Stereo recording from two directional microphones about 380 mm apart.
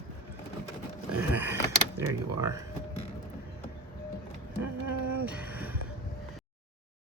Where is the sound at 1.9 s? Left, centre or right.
Centre.